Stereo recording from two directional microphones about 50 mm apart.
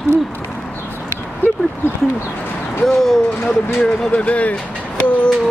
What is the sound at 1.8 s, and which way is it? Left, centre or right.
Speech, left.